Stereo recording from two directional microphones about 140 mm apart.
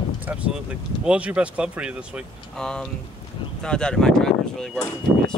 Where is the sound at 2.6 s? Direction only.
5° left (ahead or behind).